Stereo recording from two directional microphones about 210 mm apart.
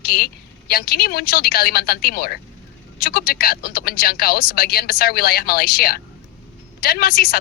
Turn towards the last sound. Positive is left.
turn(degrees=45)  # may be behind; listen again after turning